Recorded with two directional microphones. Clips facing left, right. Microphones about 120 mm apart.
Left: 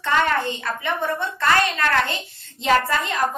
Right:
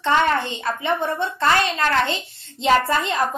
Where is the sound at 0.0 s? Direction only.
25° right (ahead or behind).